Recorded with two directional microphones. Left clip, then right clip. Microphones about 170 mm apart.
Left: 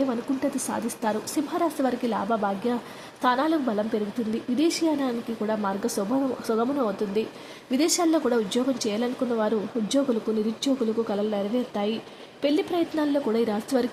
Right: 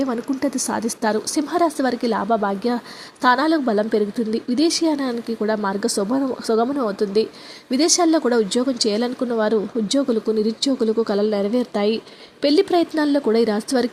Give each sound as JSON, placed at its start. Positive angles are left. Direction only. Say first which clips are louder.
{"t": 0.0, "sound": "speech", "louder": "right 4 dB", "side_deg": -25}